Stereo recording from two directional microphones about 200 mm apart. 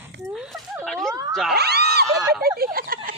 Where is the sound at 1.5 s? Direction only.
55° right (ahead or behind).